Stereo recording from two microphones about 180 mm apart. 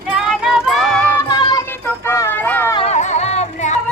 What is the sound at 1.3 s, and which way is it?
Music, 25° left (ahead or behind).